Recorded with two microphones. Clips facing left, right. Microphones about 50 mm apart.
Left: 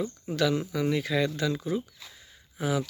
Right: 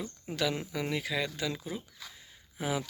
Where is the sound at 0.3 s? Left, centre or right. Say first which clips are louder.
Left 5 dB; centre.